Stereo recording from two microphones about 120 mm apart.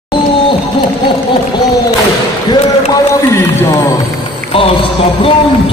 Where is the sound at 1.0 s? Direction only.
40° left (ahead or behind).